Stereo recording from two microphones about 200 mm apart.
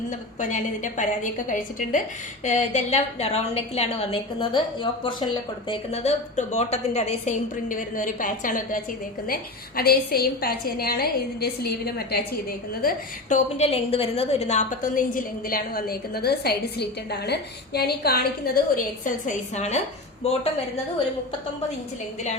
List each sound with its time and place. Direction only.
0.3 s a woman's voice: 40° left (ahead or behind)
13.3 s a woman's voice: 30° left (ahead or behind)